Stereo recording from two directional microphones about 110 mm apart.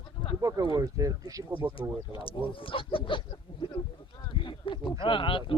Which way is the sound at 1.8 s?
55° left (ahead or behind).